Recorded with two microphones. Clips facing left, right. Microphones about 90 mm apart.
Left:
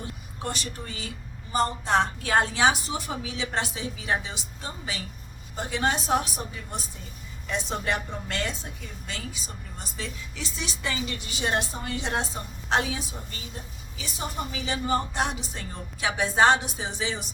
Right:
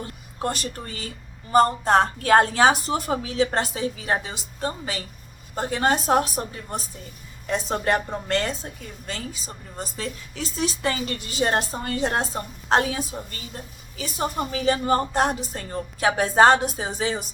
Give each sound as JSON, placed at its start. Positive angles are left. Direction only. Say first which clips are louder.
{"t": 0.4, "sound": "a woman's voice", "louder": "right 5 dB", "side_deg": -45}